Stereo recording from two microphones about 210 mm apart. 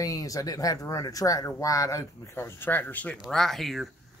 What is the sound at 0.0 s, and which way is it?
Speech, 15° left (ahead or behind).